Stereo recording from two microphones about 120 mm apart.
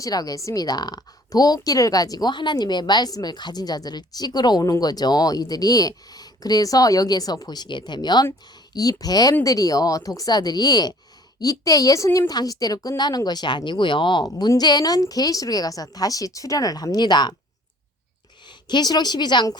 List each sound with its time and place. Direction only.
0.0 s a woman's voice: 30° left (ahead or behind)
18.4 s a woman's voice: 35° left (ahead or behind)